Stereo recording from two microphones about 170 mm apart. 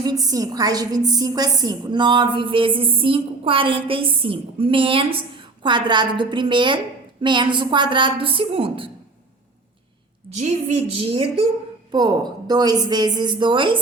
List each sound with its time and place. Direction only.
0.0 s a woman's voice: 20° right (ahead or behind)
10.2 s a woman's voice: 40° right (ahead or behind)